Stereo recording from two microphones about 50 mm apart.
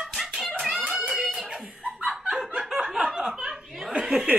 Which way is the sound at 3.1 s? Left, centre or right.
Centre.